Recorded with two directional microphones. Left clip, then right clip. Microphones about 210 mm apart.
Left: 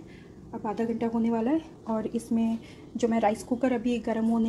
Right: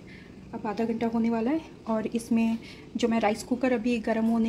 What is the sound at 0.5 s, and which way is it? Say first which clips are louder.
A woman's voice: even; centre (ahead or behind).